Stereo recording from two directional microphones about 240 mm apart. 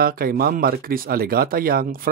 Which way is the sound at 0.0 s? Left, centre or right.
Right.